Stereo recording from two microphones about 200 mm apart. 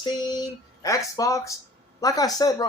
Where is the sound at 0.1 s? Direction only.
20° left (ahead or behind).